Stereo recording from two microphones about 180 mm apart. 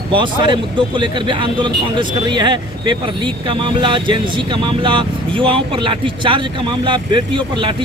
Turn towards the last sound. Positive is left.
turn(degrees=-25)  # may be behind; listen again after turning